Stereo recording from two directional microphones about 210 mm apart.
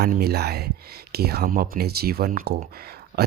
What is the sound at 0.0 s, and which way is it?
Speech, 50° right (ahead or behind).